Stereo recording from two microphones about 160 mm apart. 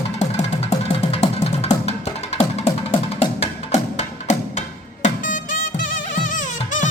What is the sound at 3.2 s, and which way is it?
Music, 40° left (ahead or behind).